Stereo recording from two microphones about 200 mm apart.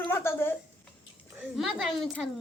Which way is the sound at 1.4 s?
5° right (ahead or behind).